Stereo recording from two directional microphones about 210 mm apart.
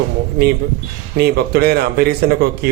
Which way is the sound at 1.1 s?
50° right (ahead or behind).